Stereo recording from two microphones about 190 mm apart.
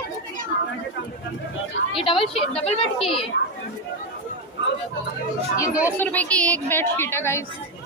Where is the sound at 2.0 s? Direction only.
30° left (ahead or behind).